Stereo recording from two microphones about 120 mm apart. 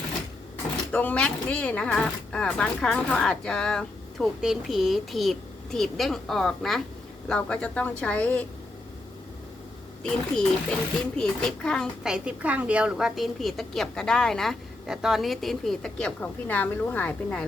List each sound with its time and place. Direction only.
0.9 s speech: 10° left (ahead or behind)
10.0 s speech: 5° left (ahead or behind)
12.0 s speech: 10° right (ahead or behind); by 17.4 s 15° left (ahead or behind)